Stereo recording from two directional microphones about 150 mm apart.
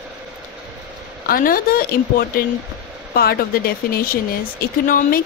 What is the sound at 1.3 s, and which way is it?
Speech, 75° left (ahead or behind).